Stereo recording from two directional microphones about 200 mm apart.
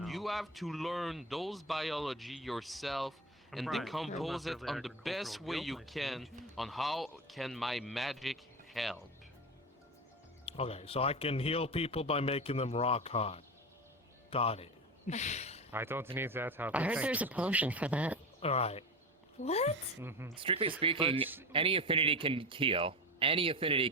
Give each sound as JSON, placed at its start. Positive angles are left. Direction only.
{"t": 0.0, "sound": "speech", "side_deg": 0}
{"t": 10.4, "sound": "speech", "side_deg": 30}
{"t": 14.3, "sound": "a sound", "side_deg": 30}
{"t": 15.7, "sound": "speech", "side_deg": -10}
{"t": 18.4, "sound": "speech", "side_deg": 30}
{"t": 20.0, "sound": "speech", "side_deg": -10}
{"t": 20.3, "sound": "a man's voice", "side_deg": -25}